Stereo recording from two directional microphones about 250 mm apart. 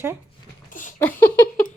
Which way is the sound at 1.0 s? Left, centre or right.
Centre.